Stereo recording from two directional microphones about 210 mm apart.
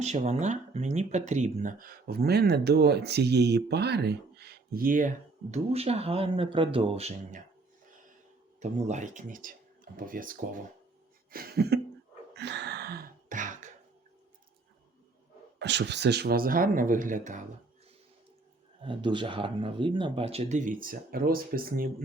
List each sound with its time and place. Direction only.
0.0 s speech: 30° right (ahead or behind)
8.6 s speech: 35° right (ahead or behind)
11.3 s a sound: 45° right (ahead or behind)
15.5 s speech: 55° right (ahead or behind); by 17.4 s 40° right (ahead or behind)
18.8 s speech: 25° right (ahead or behind); by 21.8 s 45° right (ahead or behind)